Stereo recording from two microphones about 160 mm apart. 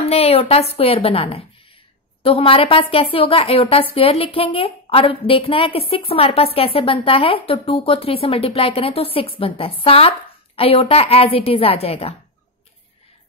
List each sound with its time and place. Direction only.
0.0 s a woman's voice: 40° left (ahead or behind)